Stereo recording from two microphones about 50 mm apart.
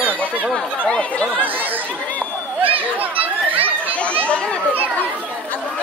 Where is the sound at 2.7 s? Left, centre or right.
Right.